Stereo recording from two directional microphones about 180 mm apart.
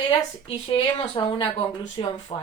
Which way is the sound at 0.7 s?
30° left (ahead or behind).